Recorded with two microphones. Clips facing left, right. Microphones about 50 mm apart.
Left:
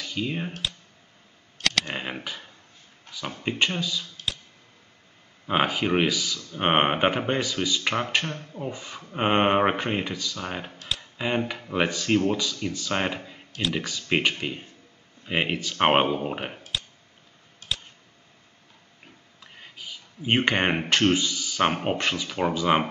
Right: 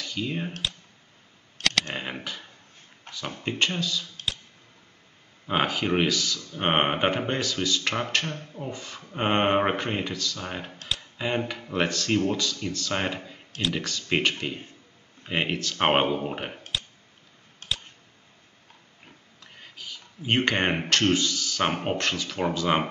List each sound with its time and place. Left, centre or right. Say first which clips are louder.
0.0 s speech: left 1 dB; centre
1.6 s a sound: even; centre
2.0 s speech: left 1 dB; centre
5.5 s speech: left 2 dB; centre
17.6 s clicking: even; right
19.4 s a sound: left 1 dB; centre
20.9 s speech: left 1 dB; centre